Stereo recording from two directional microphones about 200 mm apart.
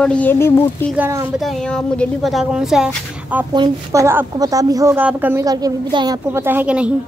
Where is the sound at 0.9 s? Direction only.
10° right (ahead or behind).